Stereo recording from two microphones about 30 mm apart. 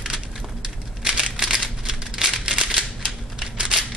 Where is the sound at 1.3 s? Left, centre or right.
Centre.